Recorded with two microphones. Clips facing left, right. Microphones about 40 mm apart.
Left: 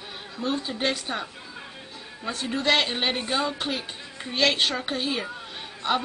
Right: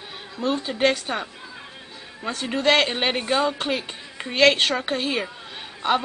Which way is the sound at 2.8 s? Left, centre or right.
Right.